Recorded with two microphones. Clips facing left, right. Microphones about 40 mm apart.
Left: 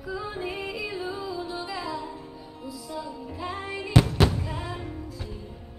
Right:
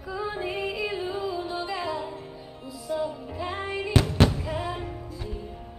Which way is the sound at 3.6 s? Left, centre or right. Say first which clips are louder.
Left 2 dB; centre.